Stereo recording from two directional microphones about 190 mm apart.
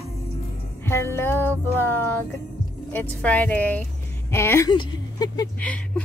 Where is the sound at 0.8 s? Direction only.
15° left (ahead or behind).